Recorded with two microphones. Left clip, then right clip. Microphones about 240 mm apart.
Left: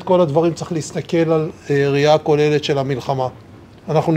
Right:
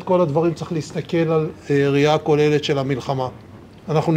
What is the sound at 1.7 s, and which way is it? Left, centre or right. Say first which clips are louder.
A man's voice: left 3 dB; left.